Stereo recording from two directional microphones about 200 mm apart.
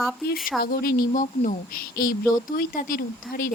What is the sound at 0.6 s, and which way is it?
Speech, 50° left (ahead or behind).